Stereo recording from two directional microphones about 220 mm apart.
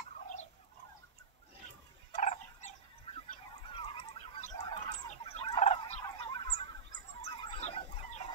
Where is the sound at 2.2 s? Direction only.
30° left (ahead or behind).